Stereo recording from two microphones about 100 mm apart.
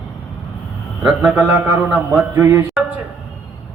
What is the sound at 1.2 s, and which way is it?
Speech, 15° right (ahead or behind).